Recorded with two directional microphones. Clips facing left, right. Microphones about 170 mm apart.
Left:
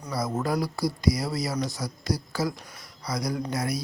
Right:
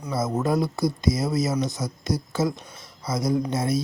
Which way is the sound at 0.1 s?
25° right (ahead or behind).